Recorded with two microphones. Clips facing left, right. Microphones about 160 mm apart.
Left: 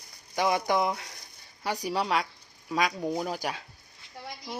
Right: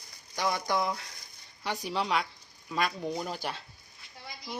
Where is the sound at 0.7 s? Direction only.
20° left (ahead or behind).